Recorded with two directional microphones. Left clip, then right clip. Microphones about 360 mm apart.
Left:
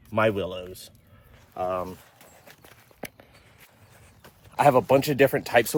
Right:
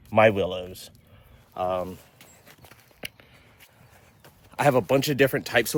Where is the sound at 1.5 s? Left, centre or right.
Centre.